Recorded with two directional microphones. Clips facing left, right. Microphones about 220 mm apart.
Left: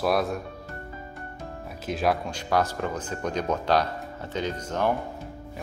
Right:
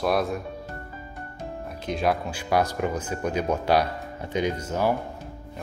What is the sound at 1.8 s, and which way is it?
Speech, centre (ahead or behind).